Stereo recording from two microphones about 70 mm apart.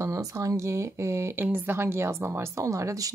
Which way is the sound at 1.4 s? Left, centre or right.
Right.